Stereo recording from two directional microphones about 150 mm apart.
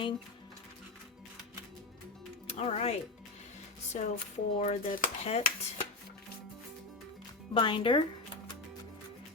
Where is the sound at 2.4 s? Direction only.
45° left (ahead or behind).